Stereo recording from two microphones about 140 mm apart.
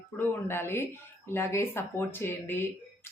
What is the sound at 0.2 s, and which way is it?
Speech, 15° left (ahead or behind).